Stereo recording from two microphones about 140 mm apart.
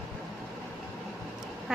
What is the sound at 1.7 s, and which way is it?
Duck, 5° right (ahead or behind).